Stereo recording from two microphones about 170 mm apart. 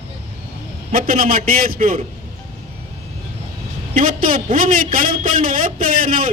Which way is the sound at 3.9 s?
55° right (ahead or behind).